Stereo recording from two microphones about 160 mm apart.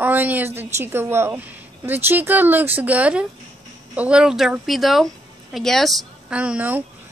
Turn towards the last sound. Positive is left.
turn(degrees=-10)  # may be behind; listen again after turning